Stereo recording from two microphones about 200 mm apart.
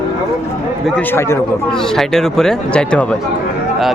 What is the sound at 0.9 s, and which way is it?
A man's voice, 10° left (ahead or behind).